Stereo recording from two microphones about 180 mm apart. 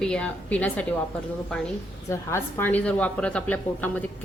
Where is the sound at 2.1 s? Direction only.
10° left (ahead or behind).